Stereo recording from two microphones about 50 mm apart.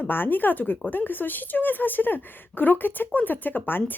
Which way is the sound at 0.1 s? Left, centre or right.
Left.